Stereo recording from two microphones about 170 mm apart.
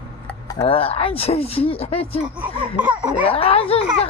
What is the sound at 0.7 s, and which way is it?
Speech, 35° left (ahead or behind).